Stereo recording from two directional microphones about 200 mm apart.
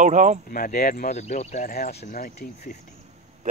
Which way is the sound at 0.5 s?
50° left (ahead or behind).